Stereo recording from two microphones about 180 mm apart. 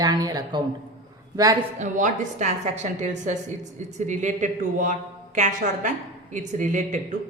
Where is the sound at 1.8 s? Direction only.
45° right (ahead or behind).